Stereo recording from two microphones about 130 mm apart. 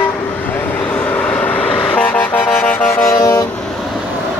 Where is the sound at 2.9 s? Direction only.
25° left (ahead or behind).